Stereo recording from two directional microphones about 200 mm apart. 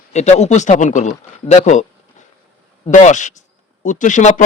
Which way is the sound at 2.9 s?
35° left (ahead or behind).